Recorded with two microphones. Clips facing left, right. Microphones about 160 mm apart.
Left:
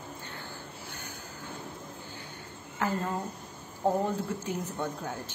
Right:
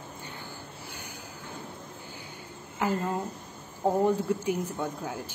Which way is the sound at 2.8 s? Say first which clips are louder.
Right 2 dB; 10° right (ahead or behind).